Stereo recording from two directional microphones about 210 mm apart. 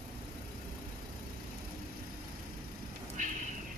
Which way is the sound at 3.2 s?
35° right (ahead or behind).